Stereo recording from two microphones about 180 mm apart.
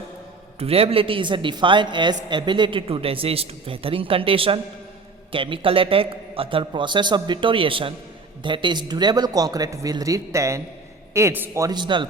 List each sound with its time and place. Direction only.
0.6 s a man's voice: 35° right (ahead or behind)